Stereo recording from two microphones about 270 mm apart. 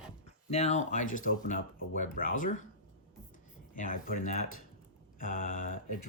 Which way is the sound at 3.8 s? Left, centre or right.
Left.